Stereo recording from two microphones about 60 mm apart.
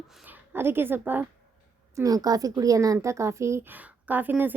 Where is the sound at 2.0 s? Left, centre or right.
Right.